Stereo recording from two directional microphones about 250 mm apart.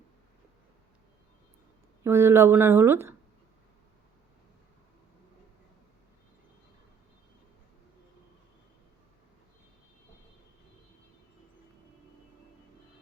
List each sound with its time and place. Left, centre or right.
2.0 s speech: centre